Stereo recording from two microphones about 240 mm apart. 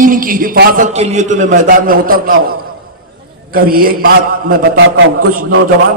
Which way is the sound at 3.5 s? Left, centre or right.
Right.